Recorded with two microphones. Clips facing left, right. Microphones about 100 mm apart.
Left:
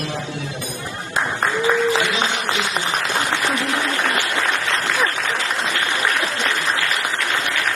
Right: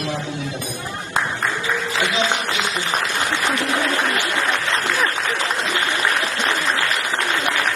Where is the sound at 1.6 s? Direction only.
25° left (ahead or behind).